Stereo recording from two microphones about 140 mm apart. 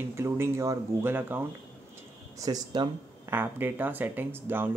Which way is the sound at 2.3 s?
25° right (ahead or behind).